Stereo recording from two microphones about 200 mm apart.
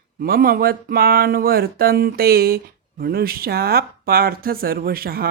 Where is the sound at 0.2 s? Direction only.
50° right (ahead or behind).